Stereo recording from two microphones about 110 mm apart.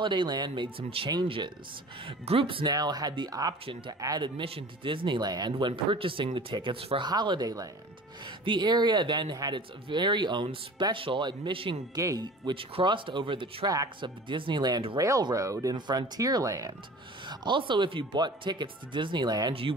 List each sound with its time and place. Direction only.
0.0 s speech: 45° right (ahead or behind)
0.8 s speech: 55° right (ahead or behind)
2.6 s speech: 35° right (ahead or behind)
4.2 s speech: 55° right (ahead or behind)
7.1 s speech: 40° right (ahead or behind)
11.9 s speech: 35° right (ahead or behind)
12.4 s speech: 50° right (ahead or behind)
15.0 s speech: 30° right (ahead or behind)
17.3 s speech: 45° right (ahead or behind)